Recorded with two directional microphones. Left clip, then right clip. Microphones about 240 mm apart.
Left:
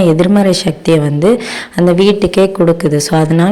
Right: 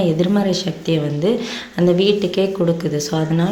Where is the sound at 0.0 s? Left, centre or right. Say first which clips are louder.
Left 8 dB; left.